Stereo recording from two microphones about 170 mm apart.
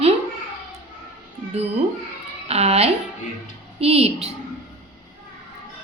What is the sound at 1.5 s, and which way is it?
Speech, 40° right (ahead or behind).